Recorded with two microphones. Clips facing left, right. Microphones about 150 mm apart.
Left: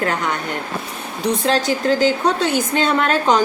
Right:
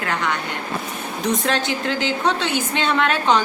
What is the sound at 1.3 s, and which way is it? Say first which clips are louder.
A woman's voice: left 4 dB; 35° left (ahead or behind).